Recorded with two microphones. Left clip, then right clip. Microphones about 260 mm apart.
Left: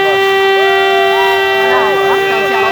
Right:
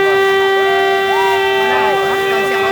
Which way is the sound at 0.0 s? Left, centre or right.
Left.